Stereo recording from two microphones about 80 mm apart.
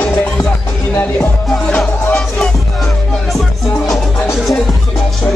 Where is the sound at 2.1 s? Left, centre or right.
Centre.